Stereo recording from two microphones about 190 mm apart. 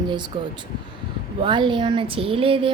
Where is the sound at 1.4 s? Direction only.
25° right (ahead or behind).